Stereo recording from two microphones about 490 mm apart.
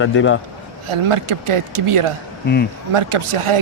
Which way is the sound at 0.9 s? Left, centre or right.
Right.